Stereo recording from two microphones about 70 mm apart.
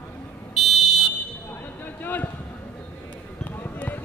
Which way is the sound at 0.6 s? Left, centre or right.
Centre.